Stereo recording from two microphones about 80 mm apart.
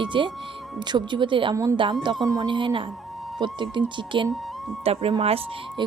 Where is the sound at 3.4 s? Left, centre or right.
Right.